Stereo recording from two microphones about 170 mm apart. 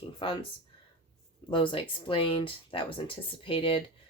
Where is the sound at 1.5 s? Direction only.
30° left (ahead or behind).